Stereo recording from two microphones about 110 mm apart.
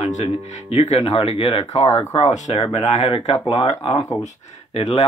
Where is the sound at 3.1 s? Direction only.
55° left (ahead or behind).